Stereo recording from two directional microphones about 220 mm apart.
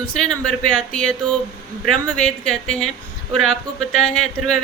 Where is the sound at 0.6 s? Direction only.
5° left (ahead or behind).